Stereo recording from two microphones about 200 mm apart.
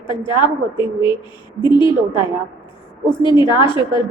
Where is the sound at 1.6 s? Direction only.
20° left (ahead or behind).